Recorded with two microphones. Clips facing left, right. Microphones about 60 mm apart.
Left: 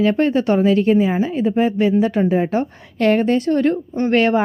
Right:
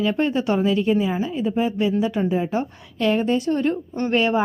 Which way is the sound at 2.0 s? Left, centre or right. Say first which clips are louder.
Left 5 dB; left.